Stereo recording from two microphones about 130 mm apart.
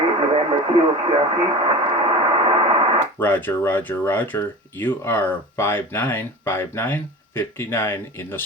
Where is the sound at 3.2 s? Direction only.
15° left (ahead or behind).